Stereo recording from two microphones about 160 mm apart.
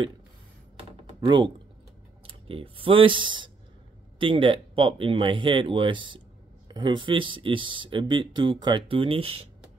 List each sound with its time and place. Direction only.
1.0 s typing: 30° right (ahead or behind)
2.2 s speech: 35° right (ahead or behind)